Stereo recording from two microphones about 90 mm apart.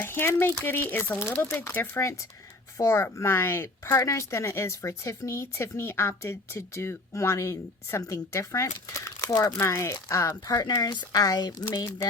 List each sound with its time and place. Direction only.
0.0 s speech: 25° left (ahead or behind); by 9.5 s 40° left (ahead or behind)
9.6 s speech: 30° left (ahead or behind); by 11.6 s 50° left (ahead or behind)